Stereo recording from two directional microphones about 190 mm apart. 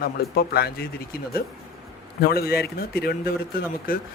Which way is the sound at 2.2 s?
55° left (ahead or behind).